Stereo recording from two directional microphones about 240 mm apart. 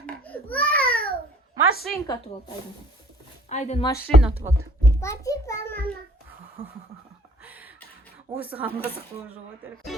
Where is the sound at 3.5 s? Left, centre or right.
Left.